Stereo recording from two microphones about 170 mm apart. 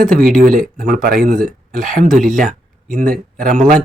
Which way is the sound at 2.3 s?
50° right (ahead or behind).